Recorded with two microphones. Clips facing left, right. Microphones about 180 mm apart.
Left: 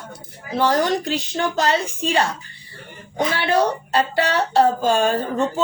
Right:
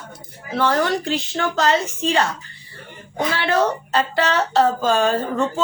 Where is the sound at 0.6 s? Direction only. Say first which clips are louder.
Left 1 dB; 15° left (ahead or behind).